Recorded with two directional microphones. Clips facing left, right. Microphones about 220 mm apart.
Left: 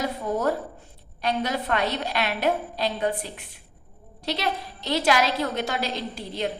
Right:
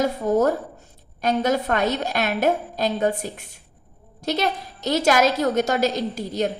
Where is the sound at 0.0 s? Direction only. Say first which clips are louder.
Right 6 dB; 45° right (ahead or behind).